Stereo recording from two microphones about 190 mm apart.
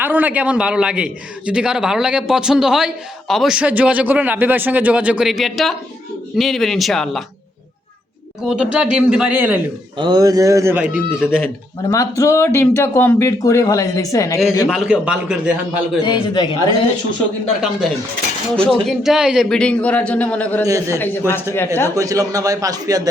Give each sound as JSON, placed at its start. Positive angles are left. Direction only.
{"t": 0.0, "sound": "a man's voice", "side_deg": -10}
{"t": 8.4, "sound": "speech", "side_deg": -5}
{"t": 10.0, "sound": "speech", "side_deg": -20}
{"t": 11.8, "sound": "speech", "side_deg": 15}
{"t": 14.7, "sound": "a man's voice", "side_deg": -5}
{"t": 16.0, "sound": "speech", "side_deg": 25}
{"t": 17.6, "sound": "a man's voice", "side_deg": 0}
{"t": 20.7, "sound": "a man's voice", "side_deg": -15}